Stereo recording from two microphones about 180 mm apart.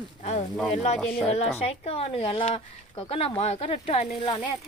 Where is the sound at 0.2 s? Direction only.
35° left (ahead or behind).